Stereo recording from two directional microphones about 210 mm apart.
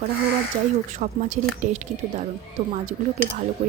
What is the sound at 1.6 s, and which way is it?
Speech, 40° right (ahead or behind).